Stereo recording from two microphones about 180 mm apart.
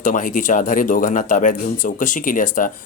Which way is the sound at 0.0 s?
45° left (ahead or behind).